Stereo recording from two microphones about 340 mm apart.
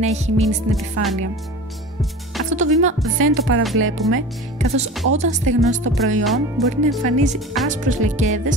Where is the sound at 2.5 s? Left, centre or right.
Centre.